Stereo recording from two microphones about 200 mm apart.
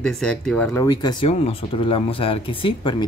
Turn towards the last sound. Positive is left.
turn(degrees=25)  # may be behind; listen again after turning